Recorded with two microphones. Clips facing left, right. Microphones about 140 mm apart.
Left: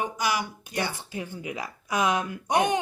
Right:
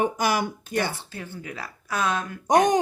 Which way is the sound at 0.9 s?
15° left (ahead or behind).